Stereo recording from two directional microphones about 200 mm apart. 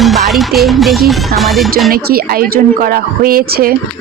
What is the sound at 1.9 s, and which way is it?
A woman's voice, 50° right (ahead or behind).